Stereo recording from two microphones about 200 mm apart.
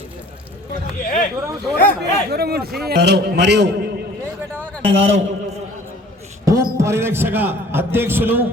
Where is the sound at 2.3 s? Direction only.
50° right (ahead or behind).